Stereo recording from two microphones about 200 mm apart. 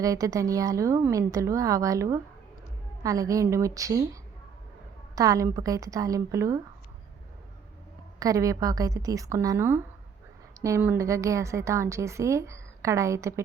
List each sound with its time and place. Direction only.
0.0 s a woman's voice: 15° right (ahead or behind)
8.2 s a woman's voice: 15° right (ahead or behind)